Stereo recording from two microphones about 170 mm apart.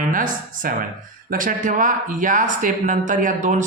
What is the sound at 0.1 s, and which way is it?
Speech, 50° right (ahead or behind).